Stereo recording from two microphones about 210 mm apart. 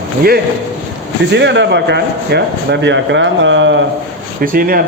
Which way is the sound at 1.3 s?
55° right (ahead or behind).